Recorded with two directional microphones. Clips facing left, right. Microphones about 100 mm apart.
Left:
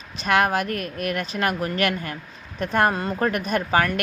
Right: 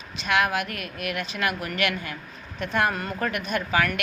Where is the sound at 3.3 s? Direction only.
40° left (ahead or behind).